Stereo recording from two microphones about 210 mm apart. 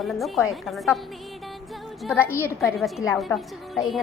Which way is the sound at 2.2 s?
10° left (ahead or behind).